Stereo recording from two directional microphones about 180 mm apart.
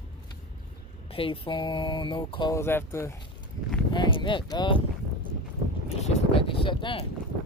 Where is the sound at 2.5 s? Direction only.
15° left (ahead or behind).